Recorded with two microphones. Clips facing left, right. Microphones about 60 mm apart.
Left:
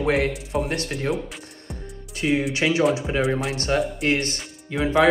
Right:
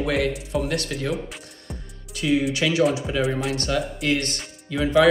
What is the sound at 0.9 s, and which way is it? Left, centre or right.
Speech, centre.